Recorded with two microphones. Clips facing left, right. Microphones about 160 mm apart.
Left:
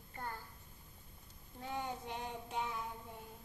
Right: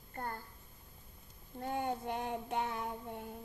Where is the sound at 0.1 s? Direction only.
50° right (ahead or behind).